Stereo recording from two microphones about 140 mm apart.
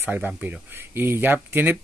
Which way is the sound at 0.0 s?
15° right (ahead or behind).